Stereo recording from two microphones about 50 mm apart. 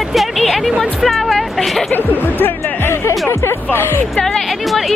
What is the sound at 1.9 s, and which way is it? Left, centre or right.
Speech, left.